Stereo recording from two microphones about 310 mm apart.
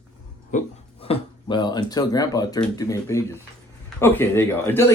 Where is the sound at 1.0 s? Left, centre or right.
Centre.